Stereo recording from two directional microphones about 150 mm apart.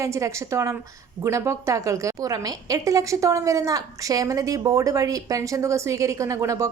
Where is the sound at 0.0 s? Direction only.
20° right (ahead or behind).